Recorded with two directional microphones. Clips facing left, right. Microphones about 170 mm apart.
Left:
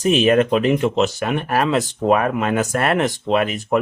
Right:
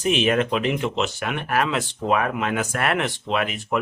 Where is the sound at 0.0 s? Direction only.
40° left (ahead or behind).